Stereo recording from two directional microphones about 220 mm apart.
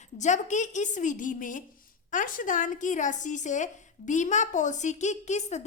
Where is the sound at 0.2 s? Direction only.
35° left (ahead or behind).